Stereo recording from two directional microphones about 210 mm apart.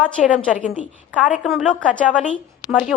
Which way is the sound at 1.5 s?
Centre (ahead or behind).